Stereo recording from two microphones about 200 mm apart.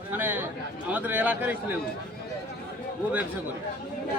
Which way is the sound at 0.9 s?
10° right (ahead or behind).